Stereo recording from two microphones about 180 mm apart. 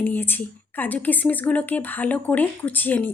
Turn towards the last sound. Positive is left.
turn(degrees=10)  # may be behind; listen again after turning